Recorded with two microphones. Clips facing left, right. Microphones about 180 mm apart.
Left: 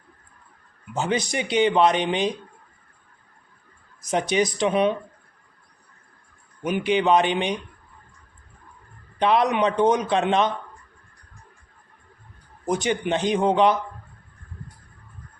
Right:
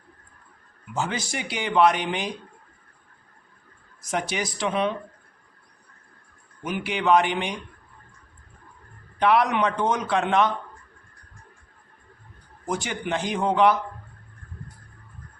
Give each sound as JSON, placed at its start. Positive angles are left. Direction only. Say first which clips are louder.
{"t": 0.9, "sound": "speech", "louder": "left 4 dB", "side_deg": 20}
{"t": 4.0, "sound": "speech", "louder": "left 6 dB", "side_deg": 20}
{"t": 6.7, "sound": "speech", "louder": "left 2 dB", "side_deg": 20}
{"t": 9.2, "sound": "speech", "louder": "left 1 dB", "side_deg": 20}
{"t": 12.6, "sound": "speech", "louder": "left 5 dB", "side_deg": 20}